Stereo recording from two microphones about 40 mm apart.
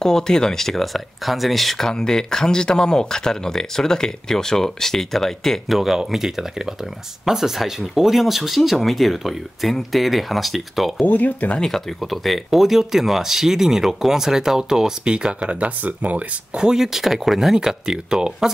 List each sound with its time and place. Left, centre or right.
0.0 s speech: centre
5.7 s speech: centre
11.0 s speech: left
11.6 s speech: centre; by 15.5 s right
15.6 s speech: right
16.5 s speech: centre
16.8 s speech: centre